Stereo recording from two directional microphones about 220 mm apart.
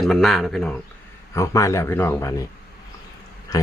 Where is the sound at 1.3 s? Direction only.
15° left (ahead or behind).